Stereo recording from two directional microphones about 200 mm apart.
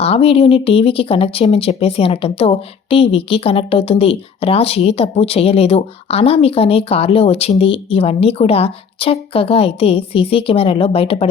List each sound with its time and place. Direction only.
0.0 s speech: 30° left (ahead or behind)